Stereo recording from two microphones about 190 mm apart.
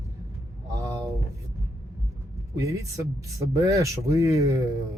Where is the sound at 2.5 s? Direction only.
15° right (ahead or behind).